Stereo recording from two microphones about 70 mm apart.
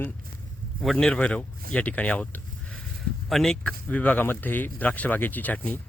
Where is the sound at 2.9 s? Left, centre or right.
Centre.